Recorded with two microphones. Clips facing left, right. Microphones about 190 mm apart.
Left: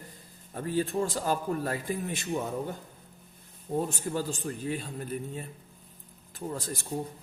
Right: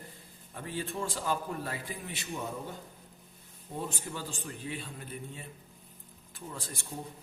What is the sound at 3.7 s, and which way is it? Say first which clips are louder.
A man's voice: left 8 dB; 40° left (ahead or behind).